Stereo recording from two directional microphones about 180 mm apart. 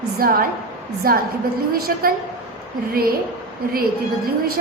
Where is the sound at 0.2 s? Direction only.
55° right (ahead or behind).